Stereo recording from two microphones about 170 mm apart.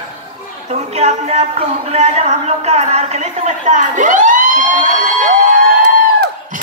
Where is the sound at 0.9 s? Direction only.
40° right (ahead or behind).